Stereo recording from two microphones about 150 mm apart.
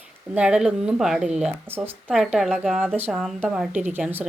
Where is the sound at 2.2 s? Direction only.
5° right (ahead or behind).